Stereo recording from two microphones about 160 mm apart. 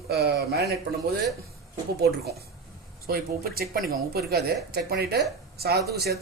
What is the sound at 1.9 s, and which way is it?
Speech, 80° right.